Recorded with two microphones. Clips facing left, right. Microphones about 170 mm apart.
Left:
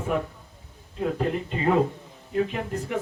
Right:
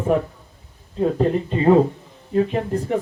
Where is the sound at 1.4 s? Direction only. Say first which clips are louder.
Right 8 dB; 35° right (ahead or behind).